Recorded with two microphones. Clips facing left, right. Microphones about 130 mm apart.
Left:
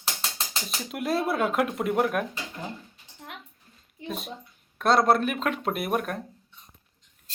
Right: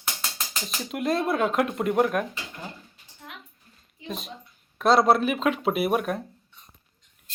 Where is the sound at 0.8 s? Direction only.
Centre (ahead or behind).